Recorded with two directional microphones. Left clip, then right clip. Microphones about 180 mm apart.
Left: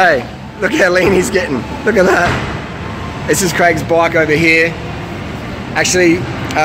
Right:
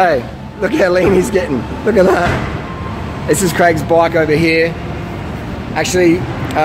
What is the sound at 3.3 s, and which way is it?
Speech, 10° right (ahead or behind).